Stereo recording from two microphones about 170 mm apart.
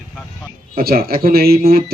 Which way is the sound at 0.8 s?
60° right (ahead or behind).